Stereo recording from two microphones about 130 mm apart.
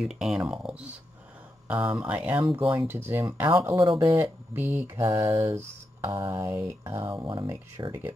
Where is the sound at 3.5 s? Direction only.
30° right (ahead or behind).